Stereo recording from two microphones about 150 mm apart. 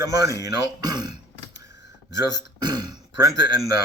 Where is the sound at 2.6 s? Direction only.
30° right (ahead or behind).